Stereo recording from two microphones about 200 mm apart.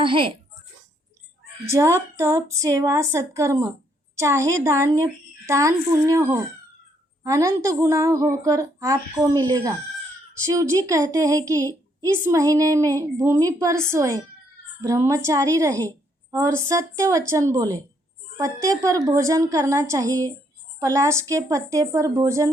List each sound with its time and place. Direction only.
0.0 s a sound: 25° right (ahead or behind)
1.7 s a woman's voice: 15° right (ahead or behind)
7.3 s a woman's voice: 15° right (ahead or behind)